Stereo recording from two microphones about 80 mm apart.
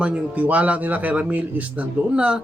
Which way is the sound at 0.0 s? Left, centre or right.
Centre.